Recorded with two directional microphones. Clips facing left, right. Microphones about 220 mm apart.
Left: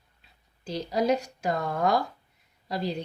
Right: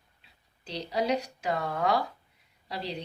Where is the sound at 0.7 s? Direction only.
45° left (ahead or behind).